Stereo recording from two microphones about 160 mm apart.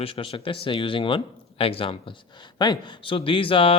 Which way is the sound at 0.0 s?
35° left (ahead or behind).